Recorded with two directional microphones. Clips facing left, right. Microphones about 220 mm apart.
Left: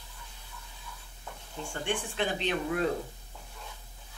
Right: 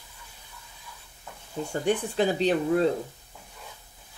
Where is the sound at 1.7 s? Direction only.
40° right (ahead or behind).